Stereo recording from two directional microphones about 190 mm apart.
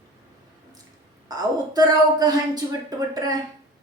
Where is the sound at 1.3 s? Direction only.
20° right (ahead or behind).